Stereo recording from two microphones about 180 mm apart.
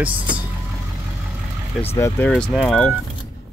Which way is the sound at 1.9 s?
15° left (ahead or behind).